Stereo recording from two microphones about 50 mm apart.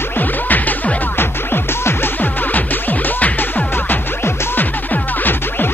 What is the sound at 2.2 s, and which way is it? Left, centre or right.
Music, left.